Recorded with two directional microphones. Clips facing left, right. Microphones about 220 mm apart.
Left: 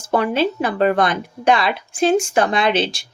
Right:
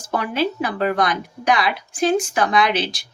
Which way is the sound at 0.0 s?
25° left (ahead or behind).